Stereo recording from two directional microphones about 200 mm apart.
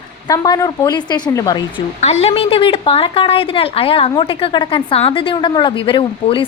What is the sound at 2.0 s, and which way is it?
A woman's voice, 30° left (ahead or behind).